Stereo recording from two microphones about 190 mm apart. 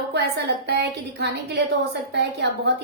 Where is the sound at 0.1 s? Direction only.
60° right (ahead or behind).